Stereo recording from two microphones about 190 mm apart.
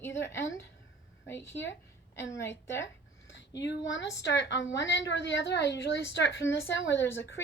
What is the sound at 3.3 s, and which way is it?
A woman's voice, 70° left (ahead or behind).